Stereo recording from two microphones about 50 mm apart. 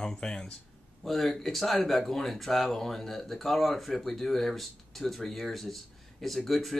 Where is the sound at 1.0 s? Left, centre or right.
Centre.